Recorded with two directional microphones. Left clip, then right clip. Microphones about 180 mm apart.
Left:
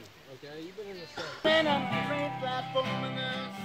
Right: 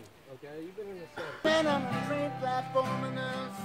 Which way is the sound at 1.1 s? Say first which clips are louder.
Left 1 dB; 50° left (ahead or behind).